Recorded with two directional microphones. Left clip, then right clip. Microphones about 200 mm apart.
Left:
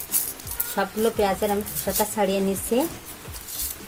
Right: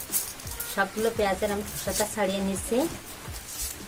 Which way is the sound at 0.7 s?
30° left (ahead or behind).